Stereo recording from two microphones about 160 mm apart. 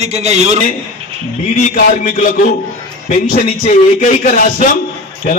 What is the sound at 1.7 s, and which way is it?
A man's voice, 60° left (ahead or behind).